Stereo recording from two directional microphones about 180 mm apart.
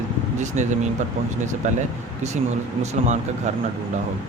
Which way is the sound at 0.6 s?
40° right (ahead or behind).